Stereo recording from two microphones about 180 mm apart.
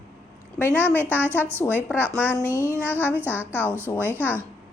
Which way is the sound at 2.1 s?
10° left (ahead or behind).